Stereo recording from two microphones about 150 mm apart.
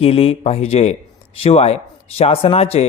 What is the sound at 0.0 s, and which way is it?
A man's voice, 40° left (ahead or behind).